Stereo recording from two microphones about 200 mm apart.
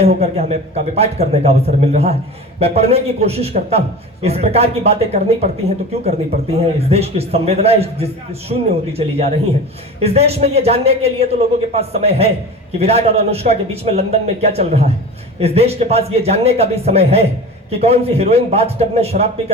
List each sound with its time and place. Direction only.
0.0 s a man's voice: 30° right (ahead or behind)